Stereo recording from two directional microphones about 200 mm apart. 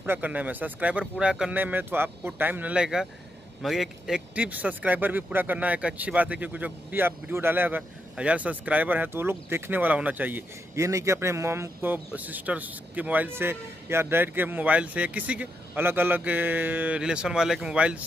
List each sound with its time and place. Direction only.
0.0 s speech: 10° right (ahead or behind)